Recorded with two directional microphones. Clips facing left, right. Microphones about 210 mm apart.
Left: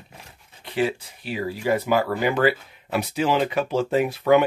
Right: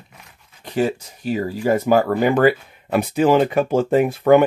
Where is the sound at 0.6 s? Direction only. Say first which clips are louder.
Right 3 dB; 45° right (ahead or behind).